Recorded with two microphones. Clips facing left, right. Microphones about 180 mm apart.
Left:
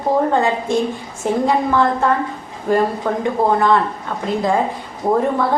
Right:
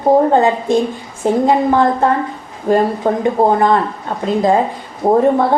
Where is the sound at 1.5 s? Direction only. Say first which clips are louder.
Right 3 dB; 40° right (ahead or behind).